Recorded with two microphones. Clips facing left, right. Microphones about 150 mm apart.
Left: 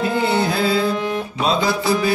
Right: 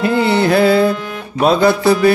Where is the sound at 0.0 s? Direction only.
70° right (ahead or behind).